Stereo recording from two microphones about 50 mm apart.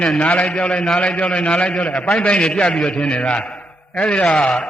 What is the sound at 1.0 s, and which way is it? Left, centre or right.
A man's voice, left.